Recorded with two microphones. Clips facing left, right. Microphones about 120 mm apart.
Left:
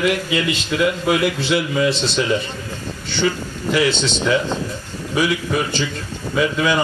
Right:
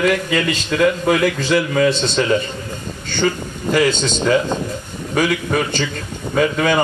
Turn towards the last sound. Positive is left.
turn(degrees=-50)  # may be behind; listen again after turning